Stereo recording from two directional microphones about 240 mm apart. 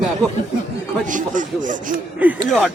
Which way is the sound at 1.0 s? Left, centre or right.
Right.